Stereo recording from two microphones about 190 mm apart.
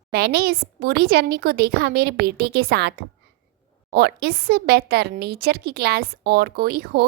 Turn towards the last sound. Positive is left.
turn(degrees=-55)  # may be behind; listen again after turning